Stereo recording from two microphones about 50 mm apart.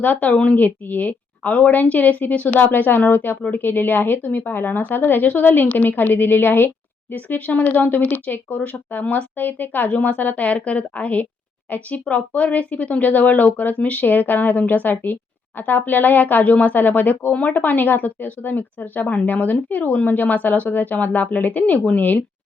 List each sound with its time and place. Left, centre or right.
0.0 s speech: left
7.1 s speech: left